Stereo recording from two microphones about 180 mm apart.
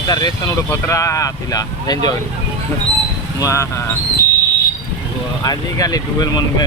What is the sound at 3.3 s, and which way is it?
Speech, 15° left (ahead or behind).